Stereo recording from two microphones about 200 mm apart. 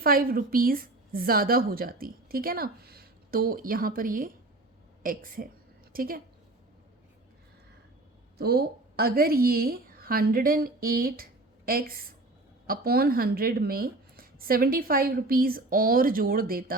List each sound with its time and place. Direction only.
0.0 s a woman's voice: 45° right (ahead or behind)
8.4 s a woman's voice: 50° right (ahead or behind)